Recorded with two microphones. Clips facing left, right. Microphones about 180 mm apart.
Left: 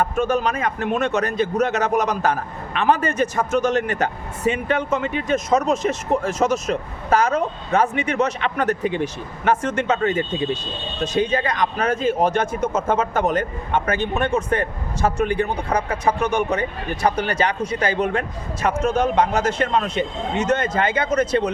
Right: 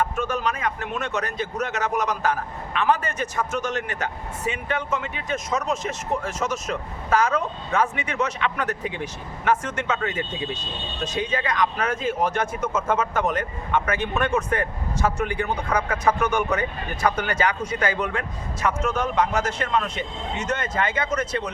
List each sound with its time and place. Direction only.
0.4 s a man's voice: 30° left (ahead or behind)